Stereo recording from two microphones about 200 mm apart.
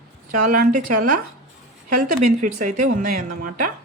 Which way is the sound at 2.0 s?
40° right (ahead or behind).